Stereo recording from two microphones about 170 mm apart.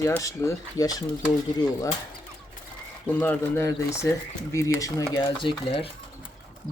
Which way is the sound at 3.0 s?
10° left (ahead or behind).